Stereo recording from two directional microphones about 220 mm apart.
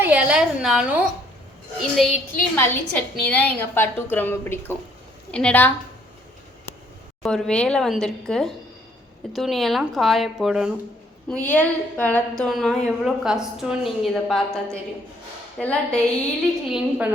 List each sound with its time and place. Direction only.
0.0 s a woman's voice: 5° right (ahead or behind)
7.2 s a woman's voice: centre (ahead or behind)